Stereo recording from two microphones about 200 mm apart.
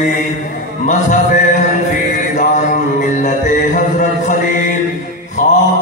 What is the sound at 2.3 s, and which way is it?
Mantra, 40° left (ahead or behind).